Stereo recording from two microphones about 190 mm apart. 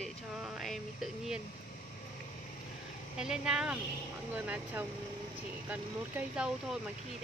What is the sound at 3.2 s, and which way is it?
Speech, 5° right (ahead or behind).